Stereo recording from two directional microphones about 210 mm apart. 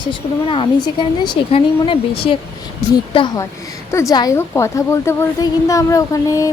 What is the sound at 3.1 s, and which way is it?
A woman's voice, 25° left (ahead or behind).